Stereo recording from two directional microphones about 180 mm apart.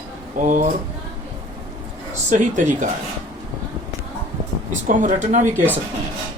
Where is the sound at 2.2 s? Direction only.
45° right (ahead or behind).